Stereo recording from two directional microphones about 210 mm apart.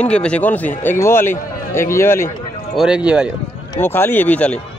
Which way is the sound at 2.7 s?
5° right (ahead or behind).